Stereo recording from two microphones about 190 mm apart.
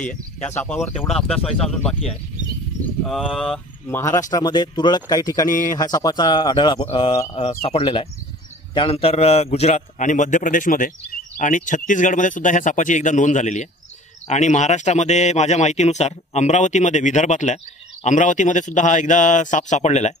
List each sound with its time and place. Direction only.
0.4 s speech: 5° left (ahead or behind)
3.8 s a man's voice: 15° left (ahead or behind); by 20.2 s 35° left (ahead or behind)